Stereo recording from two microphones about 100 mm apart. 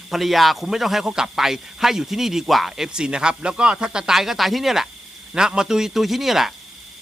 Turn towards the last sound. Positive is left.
turn(degrees=-5)  # may be behind; listen again after turning